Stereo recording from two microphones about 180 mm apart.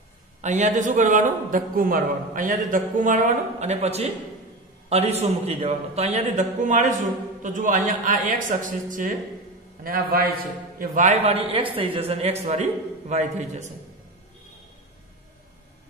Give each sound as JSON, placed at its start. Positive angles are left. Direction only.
{"t": 0.4, "sound": "a man's voice", "side_deg": -40}
{"t": 10.8, "sound": "a man's voice", "side_deg": -40}